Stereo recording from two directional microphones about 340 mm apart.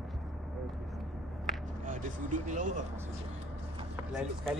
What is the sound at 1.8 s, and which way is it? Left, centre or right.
Speech, right.